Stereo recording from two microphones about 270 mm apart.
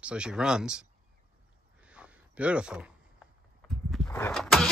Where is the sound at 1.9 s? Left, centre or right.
Centre.